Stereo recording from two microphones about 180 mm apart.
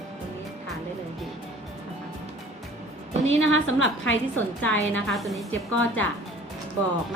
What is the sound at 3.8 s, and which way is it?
Speech, 90° left.